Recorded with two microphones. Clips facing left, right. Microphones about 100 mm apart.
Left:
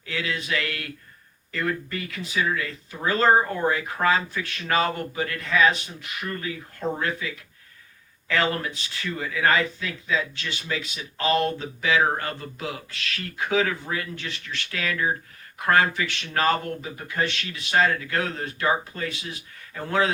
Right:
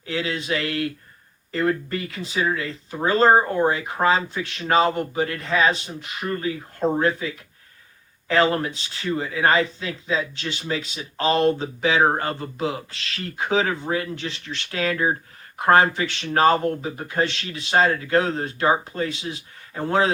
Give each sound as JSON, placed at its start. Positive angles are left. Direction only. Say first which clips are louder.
{"t": 0.0, "sound": "speech", "louder": "right 3 dB", "side_deg": -30}